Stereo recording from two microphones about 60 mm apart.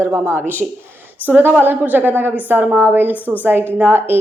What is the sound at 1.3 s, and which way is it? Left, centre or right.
A woman's voice, right.